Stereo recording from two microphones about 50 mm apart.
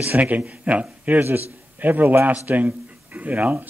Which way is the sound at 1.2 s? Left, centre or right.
Right.